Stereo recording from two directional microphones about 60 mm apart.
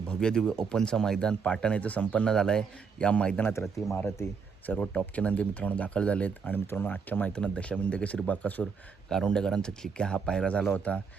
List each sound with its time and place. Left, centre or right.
0.1 s speech: centre
4.6 s speech: left
6.7 s speech: left
6.9 s speech: left
7.3 s speech: centre
8.6 s speech: centre